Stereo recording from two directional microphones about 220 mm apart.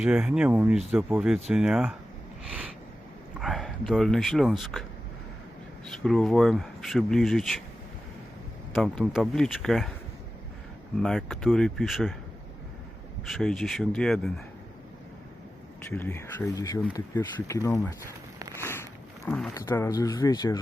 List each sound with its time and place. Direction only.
0.0 s speech: 5° right (ahead or behind)
3.4 s speech: centre (ahead or behind)
5.9 s speech: centre (ahead or behind)
8.7 s speech: centre (ahead or behind)
11.0 s speech: centre (ahead or behind)
13.2 s speech: centre (ahead or behind)
15.9 s speech: 10° left (ahead or behind)
18.6 s a sound: 10° left (ahead or behind)
19.7 s speech: 15° left (ahead or behind)